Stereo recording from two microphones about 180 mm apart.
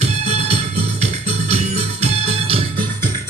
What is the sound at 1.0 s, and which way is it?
Music, 35° right (ahead or behind).